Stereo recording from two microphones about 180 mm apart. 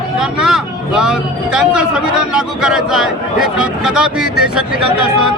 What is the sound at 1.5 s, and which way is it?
Speech, 5° right (ahead or behind).